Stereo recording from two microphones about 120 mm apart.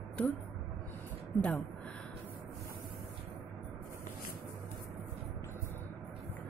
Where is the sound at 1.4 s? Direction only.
10° left (ahead or behind).